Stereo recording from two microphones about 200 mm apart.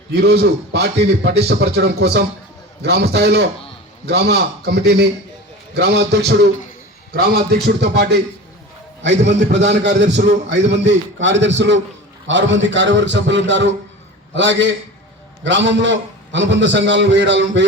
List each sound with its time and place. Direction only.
0.1 s a man's voice: 55° right (ahead or behind)